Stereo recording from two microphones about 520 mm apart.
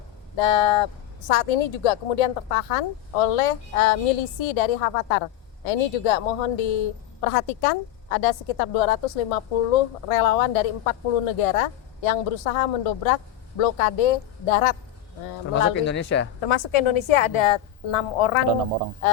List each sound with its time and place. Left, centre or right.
0.3 s speech: left
1.3 s a woman's voice: left
15.5 s speech: left
16.4 s a woman's voice: left